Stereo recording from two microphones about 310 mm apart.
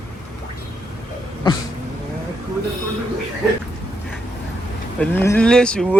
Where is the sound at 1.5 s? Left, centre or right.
Centre.